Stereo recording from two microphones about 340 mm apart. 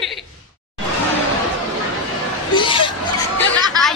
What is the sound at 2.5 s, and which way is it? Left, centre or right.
Hubbub, centre.